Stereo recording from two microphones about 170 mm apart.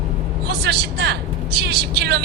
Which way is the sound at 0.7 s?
70° right (ahead or behind).